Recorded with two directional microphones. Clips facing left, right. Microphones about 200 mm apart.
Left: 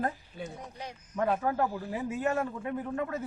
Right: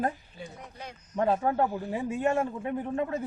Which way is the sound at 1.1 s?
25° right (ahead or behind).